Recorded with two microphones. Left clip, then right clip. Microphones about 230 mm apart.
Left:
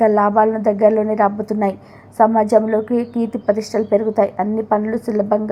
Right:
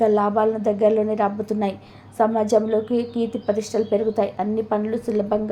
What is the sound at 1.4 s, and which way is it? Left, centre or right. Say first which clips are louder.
A woman's voice: left 5 dB; centre.